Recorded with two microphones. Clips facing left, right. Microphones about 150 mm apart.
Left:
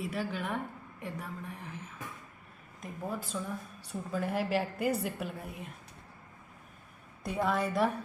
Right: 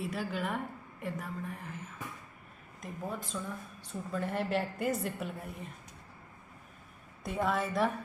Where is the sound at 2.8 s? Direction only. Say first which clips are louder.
Left 1 dB; 5° left (ahead or behind).